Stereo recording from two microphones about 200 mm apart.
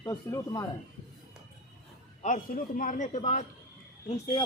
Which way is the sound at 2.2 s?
40° left (ahead or behind).